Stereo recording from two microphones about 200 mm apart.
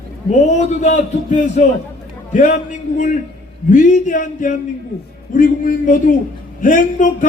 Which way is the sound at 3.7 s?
40° left (ahead or behind).